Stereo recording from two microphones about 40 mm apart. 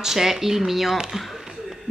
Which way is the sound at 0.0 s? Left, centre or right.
Centre.